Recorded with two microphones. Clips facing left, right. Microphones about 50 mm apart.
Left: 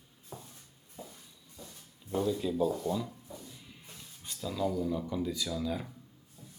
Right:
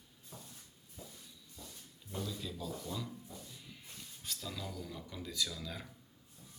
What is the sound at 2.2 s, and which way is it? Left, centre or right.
Speech, left.